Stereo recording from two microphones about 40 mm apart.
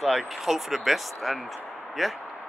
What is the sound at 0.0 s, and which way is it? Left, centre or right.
Speech, centre.